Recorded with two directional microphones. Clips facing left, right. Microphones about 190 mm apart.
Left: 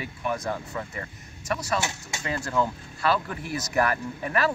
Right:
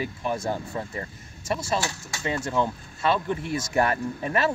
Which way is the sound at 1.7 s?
20° left (ahead or behind).